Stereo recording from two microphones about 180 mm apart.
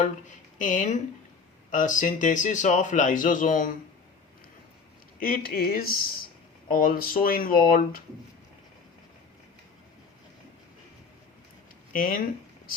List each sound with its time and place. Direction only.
0.0 s speech: 45° left (ahead or behind)
5.2 s speech: 50° left (ahead or behind)
11.9 s speech: 50° left (ahead or behind)